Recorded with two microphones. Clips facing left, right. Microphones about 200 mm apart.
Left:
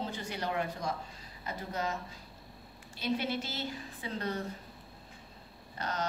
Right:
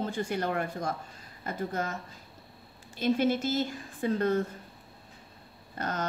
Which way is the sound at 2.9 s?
50° right (ahead or behind).